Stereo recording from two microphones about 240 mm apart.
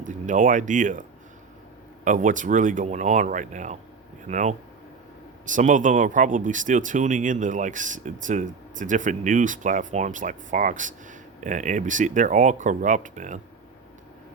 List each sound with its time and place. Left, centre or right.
0.0 s speech: right
2.0 s speech: right